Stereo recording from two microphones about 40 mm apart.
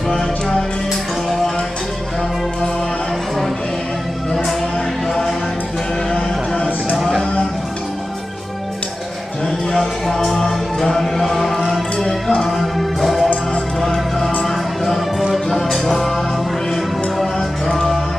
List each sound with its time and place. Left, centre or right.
0.1 s music: centre
4.3 s music: centre
7.0 s music: centre
9.7 s music: centre